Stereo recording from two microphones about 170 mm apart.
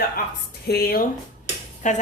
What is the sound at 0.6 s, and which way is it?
Speech, 65° left (ahead or behind).